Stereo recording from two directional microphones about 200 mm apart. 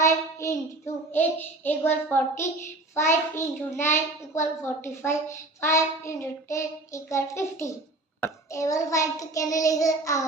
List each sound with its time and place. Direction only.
0.0 s child singing: 15° left (ahead or behind)